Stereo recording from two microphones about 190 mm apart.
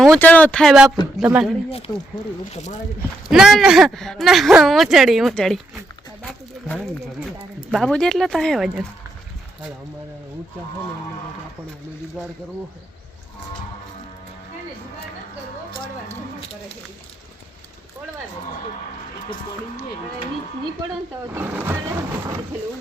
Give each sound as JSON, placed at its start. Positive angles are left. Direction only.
{"t": 0.0, "sound": "a woman's voice", "side_deg": 5}
{"t": 2.5, "sound": "speech", "side_deg": 35}
{"t": 3.2, "sound": "a woman's voice", "side_deg": -5}
{"t": 7.7, "sound": "a woman's voice", "side_deg": 5}
{"t": 21.3, "sound": "speech", "side_deg": -10}